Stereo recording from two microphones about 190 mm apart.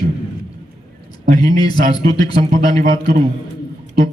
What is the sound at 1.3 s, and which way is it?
A man's voice, 20° left (ahead or behind).